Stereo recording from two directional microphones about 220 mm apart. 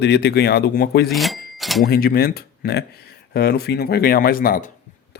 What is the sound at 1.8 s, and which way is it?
Speech, 40° left (ahead or behind).